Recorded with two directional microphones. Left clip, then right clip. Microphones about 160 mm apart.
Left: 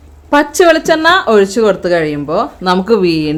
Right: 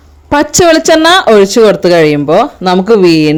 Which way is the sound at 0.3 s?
60° right (ahead or behind).